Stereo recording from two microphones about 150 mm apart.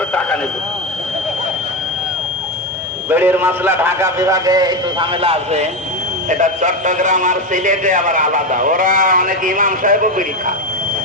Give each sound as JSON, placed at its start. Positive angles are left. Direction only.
{"t": 0.1, "sound": "a sound", "side_deg": 10}
{"t": 3.1, "sound": "a man's voice", "side_deg": -15}
{"t": 6.2, "sound": "a man's voice", "side_deg": -55}